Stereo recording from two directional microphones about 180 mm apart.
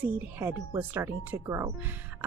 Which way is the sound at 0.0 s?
10° right (ahead or behind).